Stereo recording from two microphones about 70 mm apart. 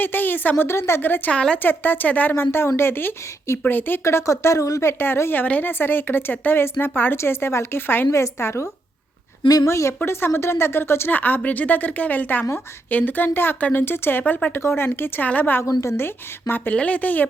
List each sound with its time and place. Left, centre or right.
0.0 s a woman's voice: left
1.0 s speech: left
1.3 s a woman's voice: centre
1.6 s speech: left
2.3 s a woman's voice: left
4.0 s speech: left
4.9 s a woman's voice: left
9.6 s speech: left
10.1 s a woman's voice: left
15.8 s a woman's voice: left
16.7 s speech: centre